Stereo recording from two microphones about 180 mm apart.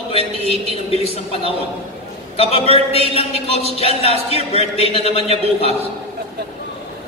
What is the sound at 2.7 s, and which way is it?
Speech, 35° left (ahead or behind).